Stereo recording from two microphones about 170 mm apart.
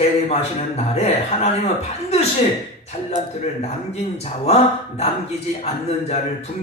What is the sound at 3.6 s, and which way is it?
Speech, 35° left (ahead or behind).